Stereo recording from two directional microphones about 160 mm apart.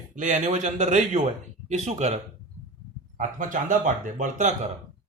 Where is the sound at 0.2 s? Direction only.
50° right (ahead or behind).